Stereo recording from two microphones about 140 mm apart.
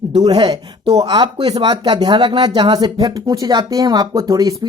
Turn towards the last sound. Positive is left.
turn(degrees=-25)  # may be behind; listen again after turning